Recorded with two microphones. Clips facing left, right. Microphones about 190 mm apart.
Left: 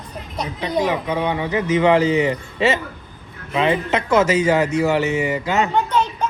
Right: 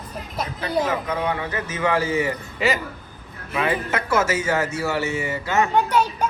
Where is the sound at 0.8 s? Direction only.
15° left (ahead or behind).